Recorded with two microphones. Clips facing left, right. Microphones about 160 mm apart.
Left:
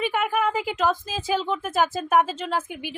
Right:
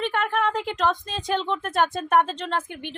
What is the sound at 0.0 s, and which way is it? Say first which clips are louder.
A woman's voice: left 1 dB; 5° left (ahead or behind).